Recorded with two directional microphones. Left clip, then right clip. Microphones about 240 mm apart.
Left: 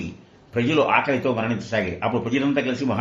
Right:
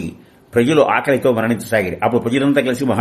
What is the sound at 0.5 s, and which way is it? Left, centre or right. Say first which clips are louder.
Speech: right 6 dB; right.